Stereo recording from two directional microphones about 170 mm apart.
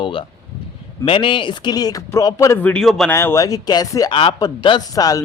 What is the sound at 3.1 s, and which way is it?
A man's voice, 15° left (ahead or behind).